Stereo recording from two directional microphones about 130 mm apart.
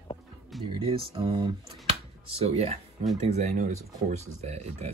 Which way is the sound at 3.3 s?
70° right (ahead or behind).